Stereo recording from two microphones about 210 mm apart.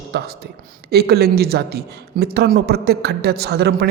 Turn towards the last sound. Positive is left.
turn(degrees=-50)  # may be behind; listen again after turning